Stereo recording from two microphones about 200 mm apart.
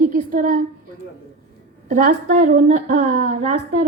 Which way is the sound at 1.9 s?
40° right (ahead or behind).